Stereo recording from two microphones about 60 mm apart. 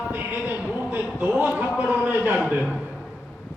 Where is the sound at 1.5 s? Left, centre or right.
Right.